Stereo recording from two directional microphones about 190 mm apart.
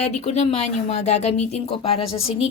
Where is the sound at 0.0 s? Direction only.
35° left (ahead or behind).